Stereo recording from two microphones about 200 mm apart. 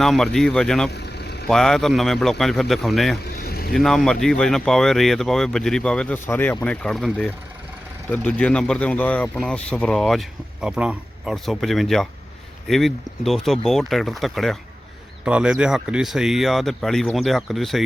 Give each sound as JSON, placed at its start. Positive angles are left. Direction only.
{"t": 0.0, "sound": "speech", "side_deg": 0}
{"t": 0.9, "sound": "vehicle", "side_deg": 55}
{"t": 1.5, "sound": "speech", "side_deg": 0}
{"t": 3.3, "sound": "vehicle", "side_deg": 50}
{"t": 3.7, "sound": "speech", "side_deg": 0}